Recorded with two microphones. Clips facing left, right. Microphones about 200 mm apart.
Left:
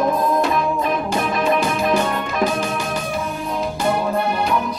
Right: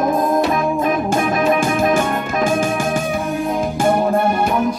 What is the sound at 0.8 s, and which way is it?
Music, 50° right (ahead or behind).